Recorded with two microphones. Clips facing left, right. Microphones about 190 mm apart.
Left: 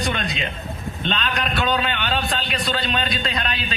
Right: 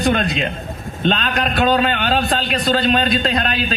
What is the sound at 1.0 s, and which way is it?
A man's voice, 40° right (ahead or behind).